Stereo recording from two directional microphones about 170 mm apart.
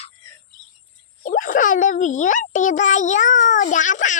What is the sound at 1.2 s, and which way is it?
A child's voice, 50° left (ahead or behind).